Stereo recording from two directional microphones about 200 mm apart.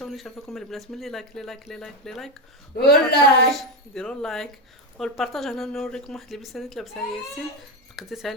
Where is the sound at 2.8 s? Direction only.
50° left (ahead or behind).